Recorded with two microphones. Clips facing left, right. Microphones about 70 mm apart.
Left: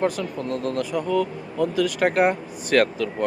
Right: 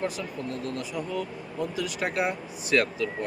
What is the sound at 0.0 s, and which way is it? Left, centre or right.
Speech, left.